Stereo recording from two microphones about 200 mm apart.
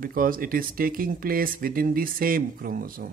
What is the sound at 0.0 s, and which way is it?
Speech, 45° right (ahead or behind).